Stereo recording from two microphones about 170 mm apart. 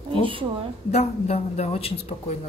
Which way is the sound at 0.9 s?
40° left (ahead or behind).